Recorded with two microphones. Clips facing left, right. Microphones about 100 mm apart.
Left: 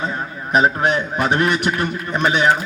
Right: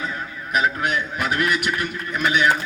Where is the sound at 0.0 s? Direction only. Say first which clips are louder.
Left 4 dB; 30° left (ahead or behind).